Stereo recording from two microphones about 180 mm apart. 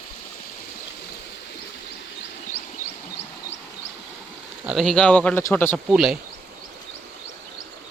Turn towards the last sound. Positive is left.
turn(degrees=0)  # may be behind; listen again after turning